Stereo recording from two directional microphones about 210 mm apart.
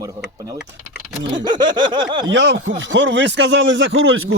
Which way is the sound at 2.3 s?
60° right (ahead or behind).